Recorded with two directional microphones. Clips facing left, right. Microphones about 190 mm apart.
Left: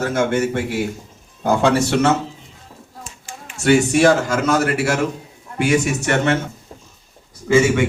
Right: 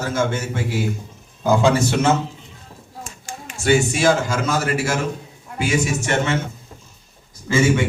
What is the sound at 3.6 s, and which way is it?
A man's voice, 65° left (ahead or behind).